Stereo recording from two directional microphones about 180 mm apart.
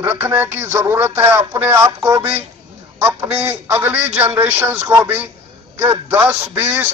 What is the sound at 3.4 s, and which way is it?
A man's voice, 10° right (ahead or behind).